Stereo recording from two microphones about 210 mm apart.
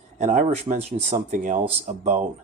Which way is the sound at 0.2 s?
30° right (ahead or behind).